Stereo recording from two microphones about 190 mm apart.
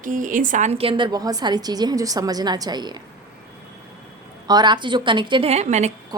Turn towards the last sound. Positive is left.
turn(degrees=-35)  # may be behind; listen again after turning